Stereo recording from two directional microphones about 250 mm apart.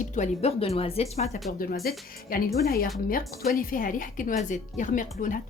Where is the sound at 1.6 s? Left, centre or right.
Left.